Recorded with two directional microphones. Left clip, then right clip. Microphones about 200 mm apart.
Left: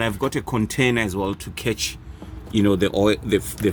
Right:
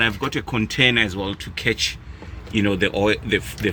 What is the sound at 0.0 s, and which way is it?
Speech, 60° left (ahead or behind).